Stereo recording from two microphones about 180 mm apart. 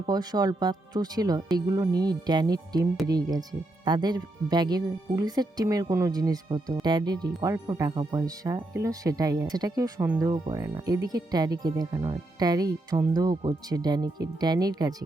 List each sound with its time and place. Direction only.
0.0 s speech: 20° right (ahead or behind)